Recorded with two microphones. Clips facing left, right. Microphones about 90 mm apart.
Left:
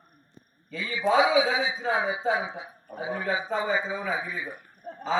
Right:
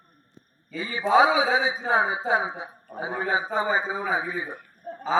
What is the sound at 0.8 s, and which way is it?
A man's voice, 40° right (ahead or behind).